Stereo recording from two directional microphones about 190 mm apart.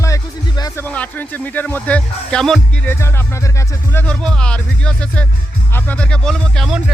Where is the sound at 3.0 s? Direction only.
15° left (ahead or behind).